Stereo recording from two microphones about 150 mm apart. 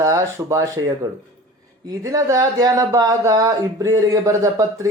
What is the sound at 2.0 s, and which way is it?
Speech, 20° right (ahead or behind).